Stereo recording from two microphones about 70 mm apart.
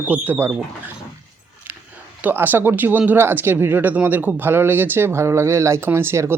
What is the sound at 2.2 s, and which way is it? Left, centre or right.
Speech, right.